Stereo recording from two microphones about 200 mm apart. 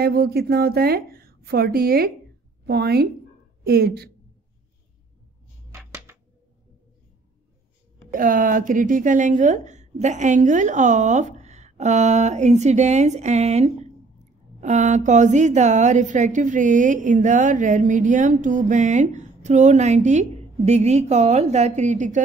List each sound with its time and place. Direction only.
0.0 s a woman's voice: 50° right (ahead or behind)
5.8 s a sound: 5° right (ahead or behind)
8.1 s a woman's voice: 40° right (ahead or behind)